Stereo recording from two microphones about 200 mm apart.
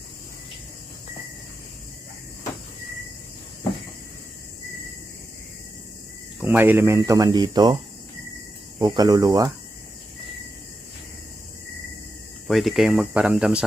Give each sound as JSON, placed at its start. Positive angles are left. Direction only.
{"t": 6.4, "sound": "speech", "side_deg": -10}
{"t": 8.8, "sound": "speech", "side_deg": -20}
{"t": 12.5, "sound": "speech", "side_deg": 0}